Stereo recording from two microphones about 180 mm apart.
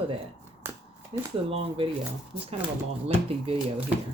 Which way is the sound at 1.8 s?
30° right (ahead or behind).